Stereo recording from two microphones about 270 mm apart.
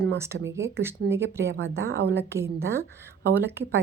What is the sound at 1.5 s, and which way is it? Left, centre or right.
Speech, right.